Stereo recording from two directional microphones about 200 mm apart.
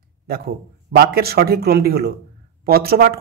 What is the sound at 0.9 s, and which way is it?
A man's voice, 50° right (ahead or behind).